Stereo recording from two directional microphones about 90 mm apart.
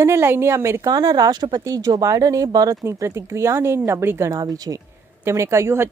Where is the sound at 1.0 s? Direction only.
50° right (ahead or behind).